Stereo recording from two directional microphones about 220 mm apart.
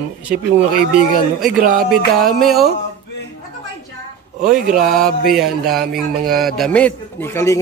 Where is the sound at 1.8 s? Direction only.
Centre (ahead or behind).